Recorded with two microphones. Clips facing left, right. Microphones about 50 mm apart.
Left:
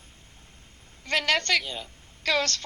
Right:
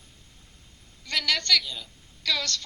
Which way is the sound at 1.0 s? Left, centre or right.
Left.